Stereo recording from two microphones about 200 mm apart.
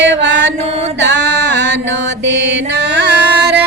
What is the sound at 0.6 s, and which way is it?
Mantra, 30° right (ahead or behind).